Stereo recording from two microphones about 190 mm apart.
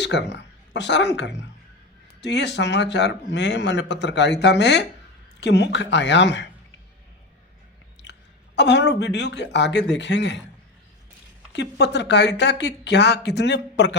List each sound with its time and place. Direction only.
0.0 s a man's voice: 65° left (ahead or behind)
8.5 s a man's voice: 65° left (ahead or behind)
11.5 s a man's voice: 65° left (ahead or behind)